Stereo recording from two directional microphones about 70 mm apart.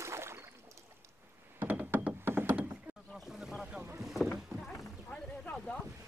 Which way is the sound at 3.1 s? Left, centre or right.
Centre.